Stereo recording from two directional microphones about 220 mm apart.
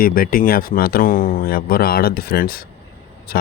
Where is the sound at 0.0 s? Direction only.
40° left (ahead or behind).